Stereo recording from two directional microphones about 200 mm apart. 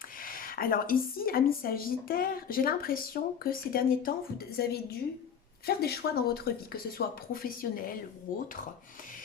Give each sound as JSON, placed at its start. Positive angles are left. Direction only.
{"t": 0.3, "sound": "speech", "side_deg": 45}